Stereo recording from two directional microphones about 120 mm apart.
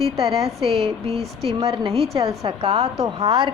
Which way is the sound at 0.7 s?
55° right (ahead or behind).